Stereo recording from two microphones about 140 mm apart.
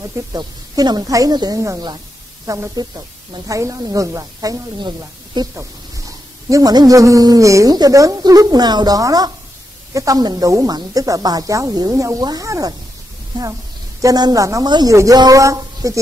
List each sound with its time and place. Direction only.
0.3 s a man's voice: 30° right (ahead or behind)
14.0 s a man's voice: 25° right (ahead or behind)